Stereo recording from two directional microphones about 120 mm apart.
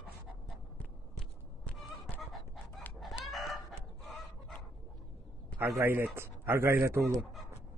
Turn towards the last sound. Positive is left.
turn(degrees=-20)  # may be behind; listen again after turning